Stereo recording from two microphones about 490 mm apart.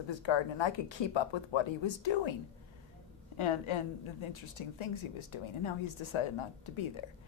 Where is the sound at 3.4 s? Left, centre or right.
Left.